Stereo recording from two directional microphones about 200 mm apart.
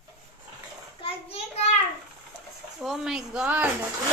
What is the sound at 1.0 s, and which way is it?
Child singing, 30° left (ahead or behind).